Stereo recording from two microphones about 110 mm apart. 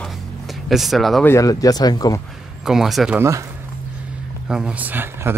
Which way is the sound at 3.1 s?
25° right (ahead or behind).